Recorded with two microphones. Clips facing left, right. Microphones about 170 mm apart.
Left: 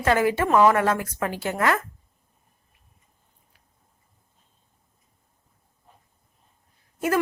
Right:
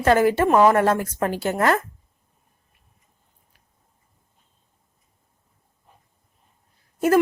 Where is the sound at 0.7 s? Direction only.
40° right (ahead or behind).